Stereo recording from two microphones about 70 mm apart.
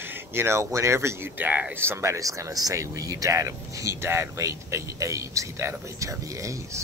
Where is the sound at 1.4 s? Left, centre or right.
Right.